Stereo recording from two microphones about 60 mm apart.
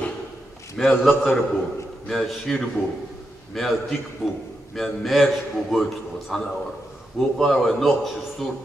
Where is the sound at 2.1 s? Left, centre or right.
Centre.